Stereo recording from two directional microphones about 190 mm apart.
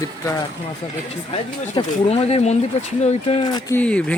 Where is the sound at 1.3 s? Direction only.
30° left (ahead or behind).